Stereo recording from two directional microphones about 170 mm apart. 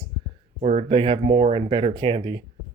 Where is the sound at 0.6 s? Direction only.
40° right (ahead or behind).